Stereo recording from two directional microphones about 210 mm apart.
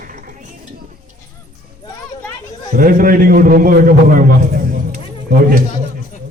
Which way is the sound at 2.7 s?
40° right (ahead or behind).